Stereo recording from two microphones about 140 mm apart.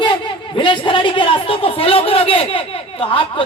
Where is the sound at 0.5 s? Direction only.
35° left (ahead or behind).